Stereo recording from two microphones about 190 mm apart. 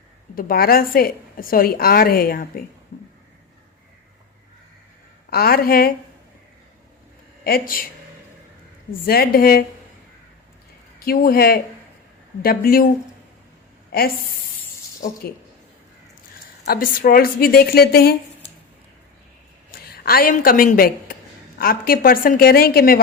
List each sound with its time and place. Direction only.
0.3 s a woman's voice: 50° left (ahead or behind)
5.3 s a woman's voice: 55° left (ahead or behind)
8.9 s a woman's voice: 50° left (ahead or behind)
11.0 s a woman's voice: 50° left (ahead or behind)
16.6 s a woman's voice: 50° left (ahead or behind)
19.9 s a woman's voice: 50° left (ahead or behind)